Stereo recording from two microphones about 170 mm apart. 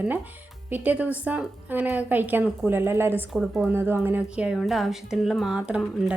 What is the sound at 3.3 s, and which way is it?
Speech, centre (ahead or behind).